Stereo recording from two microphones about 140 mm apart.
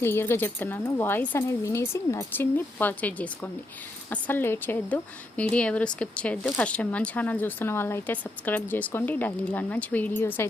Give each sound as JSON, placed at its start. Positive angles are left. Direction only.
{"t": 0.0, "sound": "speech", "side_deg": 15}